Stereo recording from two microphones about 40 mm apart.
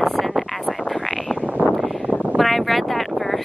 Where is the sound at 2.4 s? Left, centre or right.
Centre.